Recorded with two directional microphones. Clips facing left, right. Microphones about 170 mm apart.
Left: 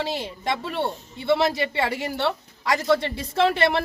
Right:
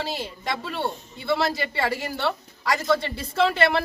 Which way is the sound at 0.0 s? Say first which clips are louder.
Left 3 dB; 20° left (ahead or behind).